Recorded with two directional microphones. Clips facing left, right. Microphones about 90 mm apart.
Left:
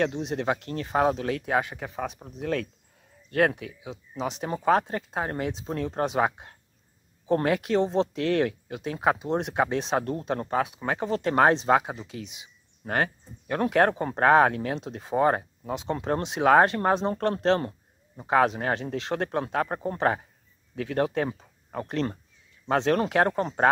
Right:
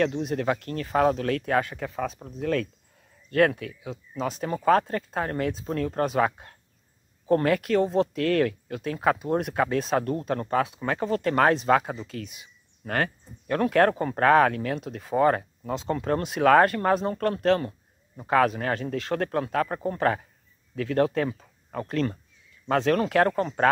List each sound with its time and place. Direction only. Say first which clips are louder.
0.0 s speech: right 2 dB; 20° left (ahead or behind)
11.8 s speech: right 2 dB; 15° left (ahead or behind)